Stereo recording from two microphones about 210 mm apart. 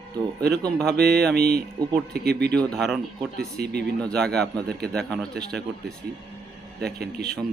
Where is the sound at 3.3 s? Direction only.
50° right (ahead or behind).